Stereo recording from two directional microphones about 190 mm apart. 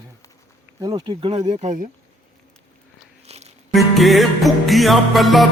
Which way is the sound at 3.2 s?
35° right (ahead or behind).